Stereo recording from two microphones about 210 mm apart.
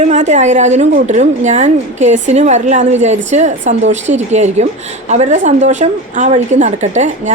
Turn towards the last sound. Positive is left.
turn(degrees=-35)  # may be behind; listen again after turning